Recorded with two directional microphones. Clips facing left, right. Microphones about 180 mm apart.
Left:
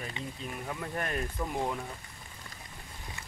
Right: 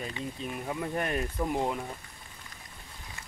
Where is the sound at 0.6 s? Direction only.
15° right (ahead or behind).